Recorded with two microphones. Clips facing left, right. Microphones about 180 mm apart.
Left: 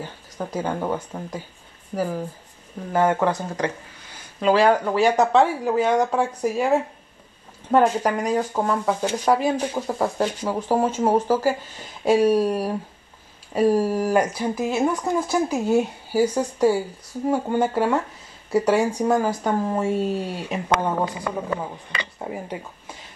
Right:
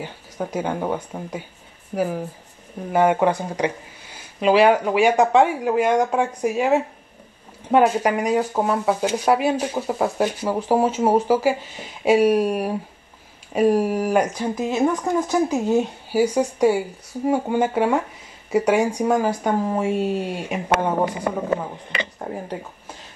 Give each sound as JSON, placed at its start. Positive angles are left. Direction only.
{"t": 0.0, "sound": "speech", "side_deg": -10}
{"t": 2.9, "sound": "speech", "side_deg": -15}
{"t": 14.3, "sound": "speech", "side_deg": 10}
{"t": 16.1, "sound": "speech", "side_deg": -10}
{"t": 22.2, "sound": "speech", "side_deg": 5}